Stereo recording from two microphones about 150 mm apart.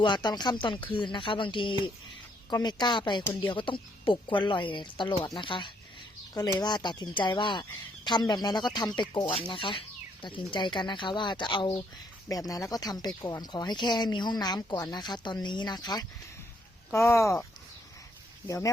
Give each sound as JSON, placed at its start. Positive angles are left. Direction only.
{"t": 0.0, "sound": "speech", "side_deg": 30}
{"t": 18.4, "sound": "speech", "side_deg": 20}